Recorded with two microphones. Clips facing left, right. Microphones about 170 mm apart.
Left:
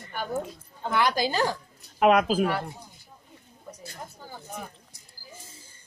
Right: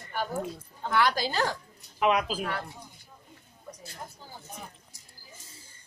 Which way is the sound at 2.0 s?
50° left (ahead or behind).